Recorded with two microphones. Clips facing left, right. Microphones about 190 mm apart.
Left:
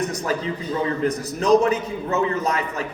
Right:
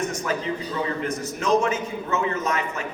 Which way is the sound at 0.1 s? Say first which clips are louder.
Left 2 dB; 35° left (ahead or behind).